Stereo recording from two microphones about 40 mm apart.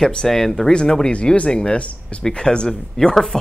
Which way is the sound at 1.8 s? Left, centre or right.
Left.